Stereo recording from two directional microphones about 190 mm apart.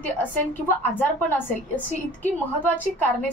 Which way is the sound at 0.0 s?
10° left (ahead or behind).